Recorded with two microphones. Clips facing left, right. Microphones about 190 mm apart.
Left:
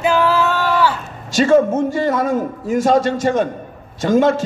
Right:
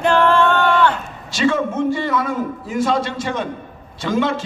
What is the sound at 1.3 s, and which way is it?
A man's voice, 45° left (ahead or behind).